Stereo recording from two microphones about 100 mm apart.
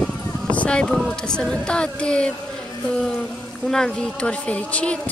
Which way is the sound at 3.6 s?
5° left (ahead or behind).